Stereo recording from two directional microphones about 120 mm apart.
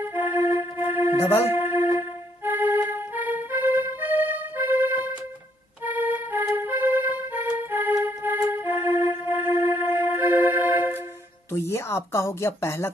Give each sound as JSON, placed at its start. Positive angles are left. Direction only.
{"t": 0.0, "sound": "music", "side_deg": -15}
{"t": 5.9, "sound": "accordion", "side_deg": -15}
{"t": 8.5, "sound": "music", "side_deg": -20}
{"t": 11.5, "sound": "a sound", "side_deg": 20}